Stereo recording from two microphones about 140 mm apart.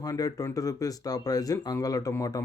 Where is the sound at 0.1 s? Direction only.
25° left (ahead or behind).